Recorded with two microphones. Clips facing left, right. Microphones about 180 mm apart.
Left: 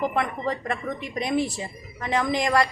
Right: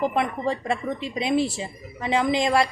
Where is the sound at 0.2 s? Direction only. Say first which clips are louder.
Right 2 dB; 10° right (ahead or behind).